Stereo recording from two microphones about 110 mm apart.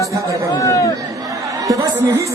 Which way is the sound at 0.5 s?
30° left (ahead or behind).